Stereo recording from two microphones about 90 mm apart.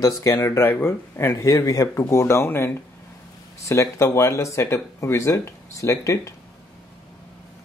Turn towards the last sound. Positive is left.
turn(degrees=35)  # may be behind; listen again after turning